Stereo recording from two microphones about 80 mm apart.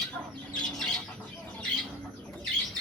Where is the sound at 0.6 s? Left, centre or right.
Centre.